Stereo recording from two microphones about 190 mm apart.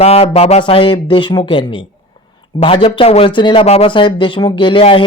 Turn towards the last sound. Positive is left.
turn(degrees=25)  # may be behind; listen again after turning